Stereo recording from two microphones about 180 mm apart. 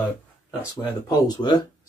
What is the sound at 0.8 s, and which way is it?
Speech, 25° left (ahead or behind).